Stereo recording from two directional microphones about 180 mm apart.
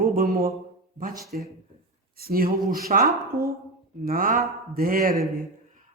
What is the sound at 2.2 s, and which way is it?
Speech, 55° right (ahead or behind).